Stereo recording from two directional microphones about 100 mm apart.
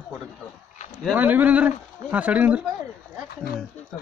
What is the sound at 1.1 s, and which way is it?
Speech, 15° right (ahead or behind).